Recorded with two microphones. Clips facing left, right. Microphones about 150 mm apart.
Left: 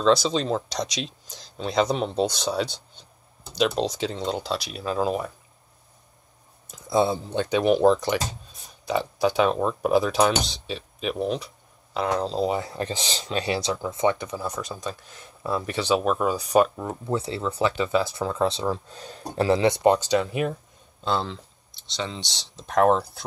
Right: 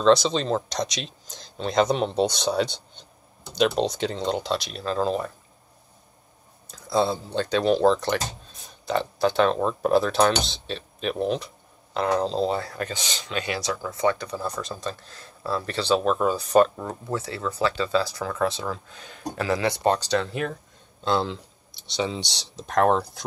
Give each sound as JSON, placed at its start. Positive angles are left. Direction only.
{"t": 0.0, "sound": "speech", "side_deg": 5}
{"t": 6.7, "sound": "speech", "side_deg": 20}
{"t": 12.7, "sound": "speech", "side_deg": 30}
{"t": 14.4, "sound": "speech", "side_deg": 5}
{"t": 17.1, "sound": "speech", "side_deg": 25}
{"t": 21.0, "sound": "speech", "side_deg": 0}